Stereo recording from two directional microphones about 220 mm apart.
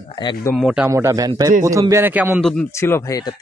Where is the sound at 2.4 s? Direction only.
5° left (ahead or behind).